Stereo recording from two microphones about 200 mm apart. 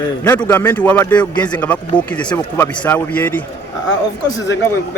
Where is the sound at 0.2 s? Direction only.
10° left (ahead or behind).